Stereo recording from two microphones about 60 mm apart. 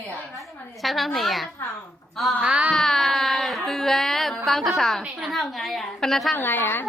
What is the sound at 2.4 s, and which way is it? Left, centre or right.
Speech, centre.